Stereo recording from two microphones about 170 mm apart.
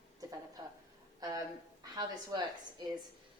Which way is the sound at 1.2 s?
20° right (ahead or behind).